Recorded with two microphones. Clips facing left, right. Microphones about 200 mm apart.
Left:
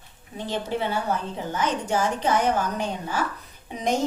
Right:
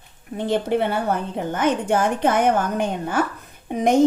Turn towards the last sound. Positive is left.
turn(degrees=-55)  # may be behind; listen again after turning